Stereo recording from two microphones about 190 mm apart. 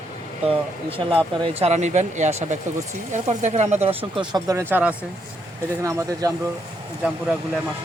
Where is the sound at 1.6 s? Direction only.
35° right (ahead or behind).